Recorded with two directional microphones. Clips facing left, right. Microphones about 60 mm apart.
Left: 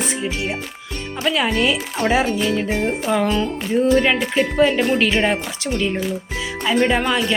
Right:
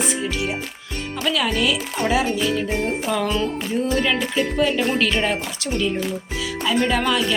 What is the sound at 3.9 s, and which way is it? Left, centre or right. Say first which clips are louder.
Speech: left 3 dB; left.